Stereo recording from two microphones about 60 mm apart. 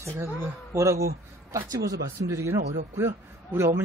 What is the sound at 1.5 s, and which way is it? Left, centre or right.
Speech, right.